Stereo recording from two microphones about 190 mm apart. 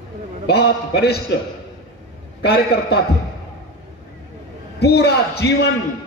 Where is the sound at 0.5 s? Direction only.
60° left (ahead or behind).